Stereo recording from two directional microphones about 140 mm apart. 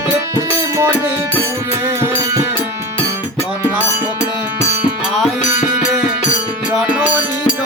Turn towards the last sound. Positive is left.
turn(degrees=-10)  # may be behind; listen again after turning